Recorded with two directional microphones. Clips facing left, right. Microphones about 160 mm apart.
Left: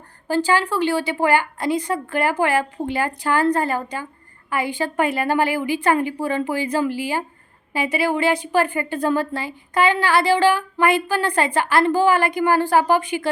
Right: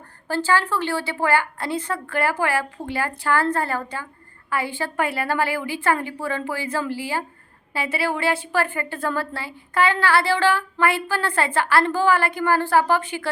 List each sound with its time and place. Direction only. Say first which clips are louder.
0.3 s a woman's voice: left 2 dB; 15° left (ahead or behind)